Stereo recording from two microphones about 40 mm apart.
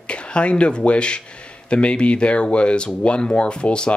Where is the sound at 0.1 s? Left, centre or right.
Left.